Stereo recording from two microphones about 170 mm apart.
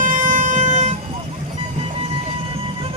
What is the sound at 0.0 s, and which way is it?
Emergency vehicle, 50° right (ahead or behind).